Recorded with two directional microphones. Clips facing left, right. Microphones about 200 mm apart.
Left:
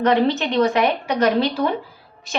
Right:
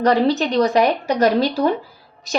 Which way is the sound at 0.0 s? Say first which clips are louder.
Right 1 dB; 35° right (ahead or behind).